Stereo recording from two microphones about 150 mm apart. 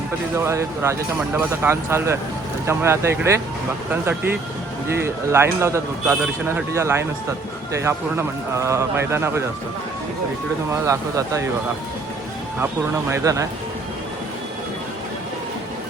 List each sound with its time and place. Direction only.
0.3 s speech: 20° right (ahead or behind)
4.9 s speech: 15° right (ahead or behind)
10.8 s speech: 20° right (ahead or behind)
13.1 s speech: 20° right (ahead or behind)